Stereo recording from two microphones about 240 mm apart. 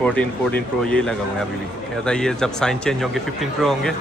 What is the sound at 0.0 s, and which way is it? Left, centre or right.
Speech, centre.